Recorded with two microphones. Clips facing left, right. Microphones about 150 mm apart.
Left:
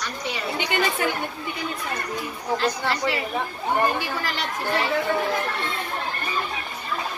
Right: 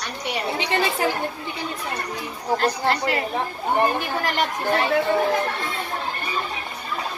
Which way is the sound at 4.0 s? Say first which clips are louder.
Right 4 dB; 50° right (ahead or behind).